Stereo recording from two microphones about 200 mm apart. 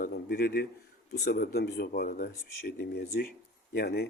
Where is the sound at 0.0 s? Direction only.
50° left (ahead or behind).